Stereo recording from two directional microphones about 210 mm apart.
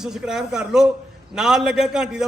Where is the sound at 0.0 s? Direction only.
Centre (ahead or behind).